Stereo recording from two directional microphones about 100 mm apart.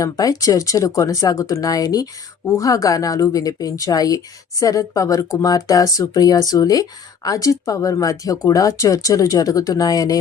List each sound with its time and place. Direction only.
0.0 s a woman's voice: 35° left (ahead or behind)